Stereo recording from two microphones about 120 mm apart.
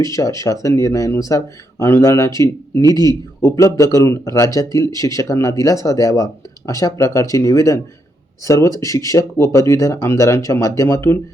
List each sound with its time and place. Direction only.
0.0 s speech: 30° left (ahead or behind)